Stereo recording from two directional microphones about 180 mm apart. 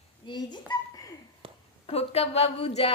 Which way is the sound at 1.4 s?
30° right (ahead or behind).